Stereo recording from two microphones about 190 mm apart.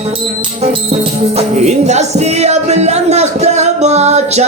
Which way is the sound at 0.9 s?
35° right (ahead or behind).